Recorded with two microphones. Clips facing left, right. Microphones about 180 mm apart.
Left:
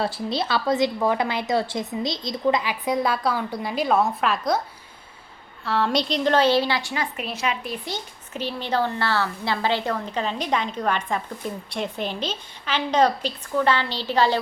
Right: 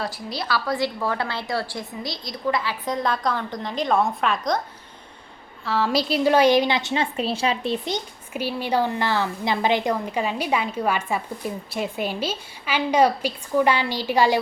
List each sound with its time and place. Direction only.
0.0 s a woman's voice: 25° left (ahead or behind); by 4.6 s 5° left (ahead or behind)
5.6 s a woman's voice: centre (ahead or behind)